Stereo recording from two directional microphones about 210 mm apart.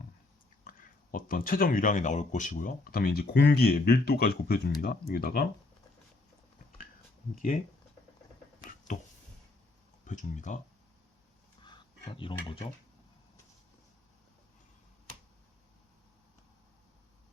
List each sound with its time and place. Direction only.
0.6 s speech: 40° left (ahead or behind)
10.0 s speech: 40° left (ahead or behind)
11.6 s a sound: 25° left (ahead or behind)